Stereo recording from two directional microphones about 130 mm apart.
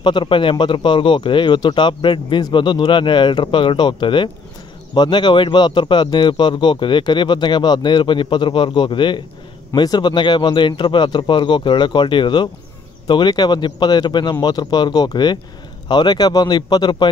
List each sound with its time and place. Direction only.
0.0 s speech: 40° left (ahead or behind)